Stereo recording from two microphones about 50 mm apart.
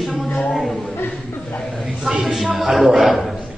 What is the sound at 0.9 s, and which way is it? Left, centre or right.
Chuckle, left.